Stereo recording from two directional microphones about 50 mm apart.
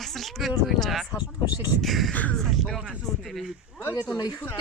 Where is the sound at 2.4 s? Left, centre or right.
Centre.